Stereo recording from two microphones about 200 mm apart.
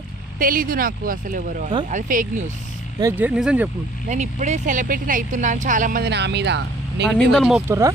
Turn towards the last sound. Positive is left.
turn(degrees=-15)  # may be behind; listen again after turning